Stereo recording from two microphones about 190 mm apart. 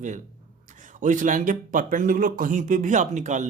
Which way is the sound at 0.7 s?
40° right (ahead or behind).